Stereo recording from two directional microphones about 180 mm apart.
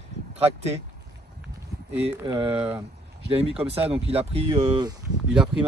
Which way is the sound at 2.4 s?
30° right (ahead or behind).